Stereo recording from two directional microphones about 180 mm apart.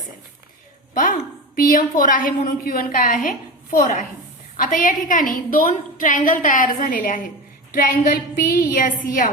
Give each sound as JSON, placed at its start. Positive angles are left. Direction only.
{"t": 1.5, "sound": "a woman's voice", "side_deg": 50}